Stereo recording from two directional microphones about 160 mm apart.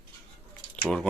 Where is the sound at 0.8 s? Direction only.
5° left (ahead or behind).